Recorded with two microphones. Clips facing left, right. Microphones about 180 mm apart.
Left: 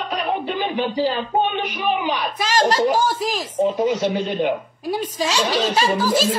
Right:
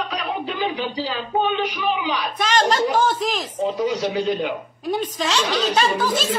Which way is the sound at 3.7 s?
45° left (ahead or behind).